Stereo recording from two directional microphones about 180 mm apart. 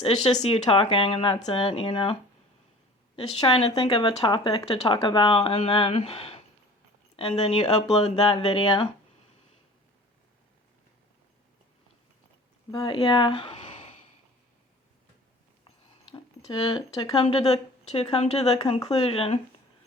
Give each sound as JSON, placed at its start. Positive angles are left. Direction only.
{"t": 0.4, "sound": "speech", "side_deg": 30}
{"t": 3.2, "sound": "speech", "side_deg": 35}
{"t": 12.7, "sound": "speech", "side_deg": 30}
{"t": 15.6, "sound": "a sound", "side_deg": 30}
{"t": 18.0, "sound": "speech", "side_deg": 35}